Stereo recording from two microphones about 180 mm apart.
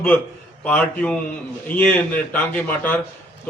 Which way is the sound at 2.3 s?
10° left (ahead or behind).